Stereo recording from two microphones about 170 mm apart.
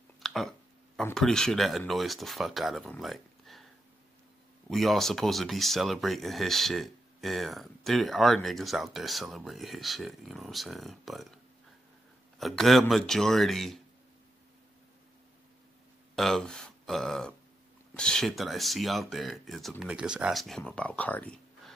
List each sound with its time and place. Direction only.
0.2 s a sound: centre (ahead or behind)
1.1 s speech: 5° left (ahead or behind)
2.9 s a sound: centre (ahead or behind)
4.6 s speech: centre (ahead or behind)
12.4 s speech: centre (ahead or behind)
16.2 s speech: centre (ahead or behind)